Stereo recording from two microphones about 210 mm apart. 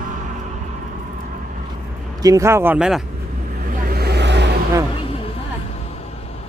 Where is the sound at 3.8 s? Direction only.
50° right (ahead or behind).